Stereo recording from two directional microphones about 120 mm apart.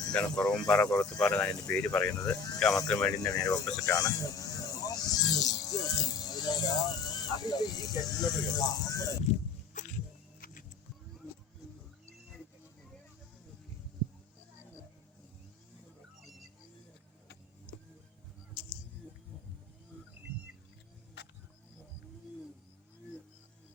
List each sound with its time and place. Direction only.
0.1 s speech: 10° left (ahead or behind)
0.9 s speech: 25° left (ahead or behind)
1.4 s speech: 10° left (ahead or behind)
3.1 s speech: 30° left (ahead or behind)
9.3 s speech: 65° left (ahead or behind)
9.7 s music: 90° left